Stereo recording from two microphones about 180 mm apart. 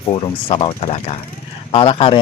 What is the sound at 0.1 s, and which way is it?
Speech, 30° left (ahead or behind).